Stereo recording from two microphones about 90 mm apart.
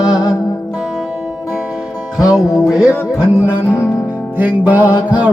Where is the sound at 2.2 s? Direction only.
5° right (ahead or behind).